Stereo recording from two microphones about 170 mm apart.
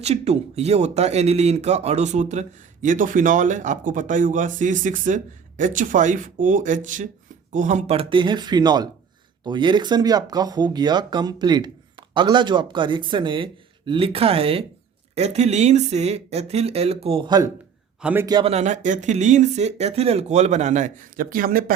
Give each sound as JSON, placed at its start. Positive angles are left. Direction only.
{"t": 0.0, "sound": "a man's voice", "side_deg": -40}
{"t": 18.0, "sound": "a man's voice", "side_deg": -10}
{"t": 18.3, "sound": "speech", "side_deg": -25}
{"t": 18.5, "sound": "a man's voice", "side_deg": -45}